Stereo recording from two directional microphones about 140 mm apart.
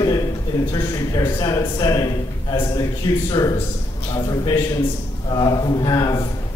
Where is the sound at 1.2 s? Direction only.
25° left (ahead or behind).